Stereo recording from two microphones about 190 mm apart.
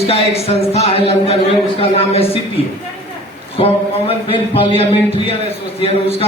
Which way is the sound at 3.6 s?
30° left (ahead or behind).